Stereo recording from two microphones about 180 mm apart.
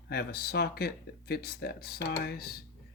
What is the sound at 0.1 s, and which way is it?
Speech, 60° left (ahead or behind).